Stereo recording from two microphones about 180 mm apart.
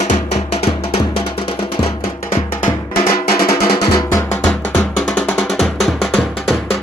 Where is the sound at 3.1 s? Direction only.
55° left (ahead or behind).